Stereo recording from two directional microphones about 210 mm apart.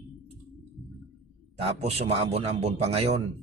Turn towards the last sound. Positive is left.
turn(degrees=-30)  # may be behind; listen again after turning